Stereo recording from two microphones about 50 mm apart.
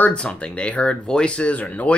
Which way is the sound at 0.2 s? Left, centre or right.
Left.